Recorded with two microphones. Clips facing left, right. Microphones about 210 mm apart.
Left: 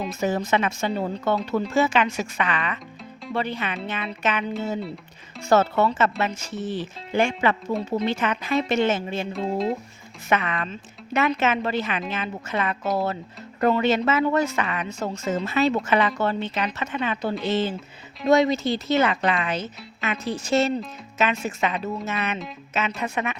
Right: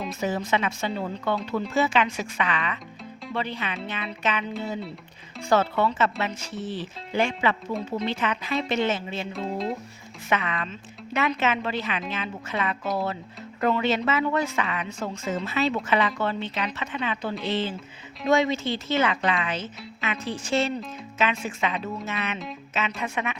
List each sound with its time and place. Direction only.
0.2 s speech: 45° left (ahead or behind)
9.3 s speech: centre (ahead or behind)
10.2 s speech: 50° left (ahead or behind)